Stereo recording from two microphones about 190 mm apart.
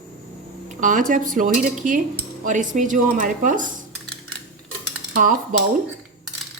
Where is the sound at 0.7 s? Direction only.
45° right (ahead or behind).